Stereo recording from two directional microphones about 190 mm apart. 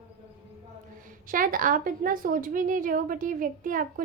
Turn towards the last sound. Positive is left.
turn(degrees=-45)  # may be behind; listen again after turning